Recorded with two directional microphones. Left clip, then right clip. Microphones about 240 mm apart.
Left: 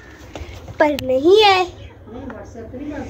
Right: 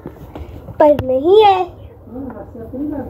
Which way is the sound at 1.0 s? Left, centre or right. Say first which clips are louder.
Right 2 dB; centre.